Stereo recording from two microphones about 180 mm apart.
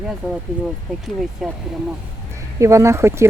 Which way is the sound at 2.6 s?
15° right (ahead or behind).